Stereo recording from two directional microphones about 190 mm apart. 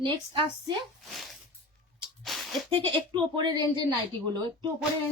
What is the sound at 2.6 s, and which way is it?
Speech, 25° right (ahead or behind).